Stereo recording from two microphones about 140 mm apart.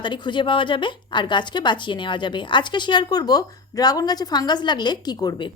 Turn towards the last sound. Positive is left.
turn(degrees=30)  # may be behind; listen again after turning